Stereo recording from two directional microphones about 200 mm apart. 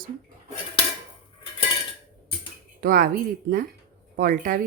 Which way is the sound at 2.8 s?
45° right (ahead or behind).